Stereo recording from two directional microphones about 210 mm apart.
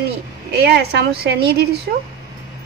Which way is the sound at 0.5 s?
50° right (ahead or behind).